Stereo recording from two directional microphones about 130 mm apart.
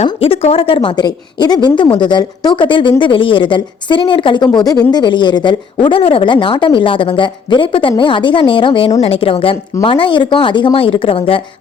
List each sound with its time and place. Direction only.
0.2 s a woman's voice: 45° left (ahead or behind)